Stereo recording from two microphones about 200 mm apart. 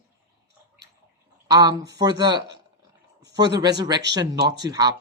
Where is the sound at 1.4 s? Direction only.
20° right (ahead or behind).